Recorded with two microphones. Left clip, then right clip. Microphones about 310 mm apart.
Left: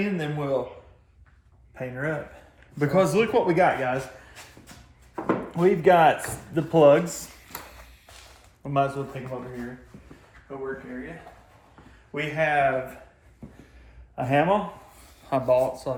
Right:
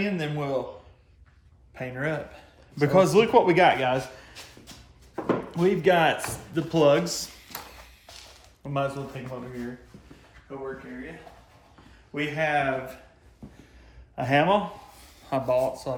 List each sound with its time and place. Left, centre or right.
0.0 s speech: centre
1.7 s speech: centre
2.7 s speech: centre
3.4 s speech: centre
5.1 s a sound: centre
10.5 s speech: centre
12.1 s speech: centre
13.4 s a sound: centre
14.2 s speech: centre